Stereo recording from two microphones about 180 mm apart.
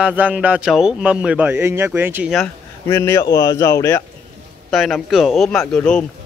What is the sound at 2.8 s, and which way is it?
Speech, 15° left (ahead or behind).